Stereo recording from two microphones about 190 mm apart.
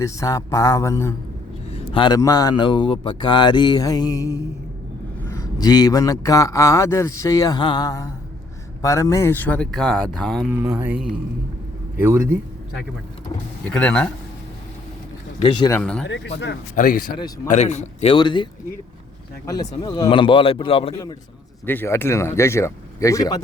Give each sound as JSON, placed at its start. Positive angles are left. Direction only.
{"t": 0.0, "sound": "a man's voice", "side_deg": 15}
{"t": 1.7, "sound": "a man's voice", "side_deg": 25}
{"t": 10.7, "sound": "mantra", "side_deg": -5}
{"t": 11.9, "sound": "a man's voice", "side_deg": -15}
{"t": 13.7, "sound": "a man's voice", "side_deg": 5}
{"t": 15.4, "sound": "a man's voice", "side_deg": 25}
{"t": 15.7, "sound": "mantra", "side_deg": 5}
{"t": 16.0, "sound": "a man's voice", "side_deg": 65}
{"t": 16.7, "sound": "speech", "side_deg": 50}
{"t": 17.2, "sound": "a man's voice", "side_deg": 20}
{"t": 17.5, "sound": "a man's voice", "side_deg": 40}
{"t": 19.7, "sound": "a man's voice", "side_deg": 25}
{"t": 21.7, "sound": "a man's voice", "side_deg": 10}